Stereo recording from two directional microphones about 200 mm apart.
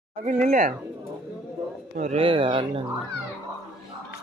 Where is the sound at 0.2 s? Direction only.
40° right (ahead or behind).